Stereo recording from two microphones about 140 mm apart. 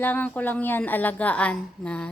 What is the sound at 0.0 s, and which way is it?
A woman's voice, 10° left (ahead or behind).